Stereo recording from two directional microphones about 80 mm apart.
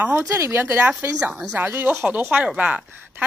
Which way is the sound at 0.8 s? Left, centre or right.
Centre.